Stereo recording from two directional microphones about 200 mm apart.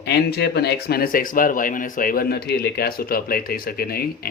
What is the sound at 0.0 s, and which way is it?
Speech, 55° left (ahead or behind).